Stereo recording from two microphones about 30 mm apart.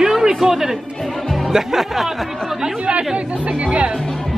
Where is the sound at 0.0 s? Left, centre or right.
Right.